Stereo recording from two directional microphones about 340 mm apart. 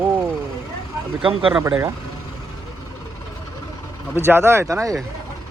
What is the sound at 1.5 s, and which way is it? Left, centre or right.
Speech, centre.